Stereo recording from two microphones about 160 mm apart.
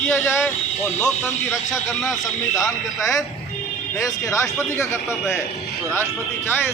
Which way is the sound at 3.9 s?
20° left (ahead or behind).